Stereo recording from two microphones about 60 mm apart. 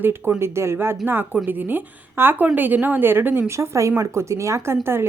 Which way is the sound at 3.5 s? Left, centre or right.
Right.